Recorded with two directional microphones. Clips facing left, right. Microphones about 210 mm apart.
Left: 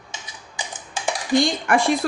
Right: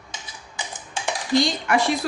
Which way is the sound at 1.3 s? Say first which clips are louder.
Left 2 dB; 50° left (ahead or behind).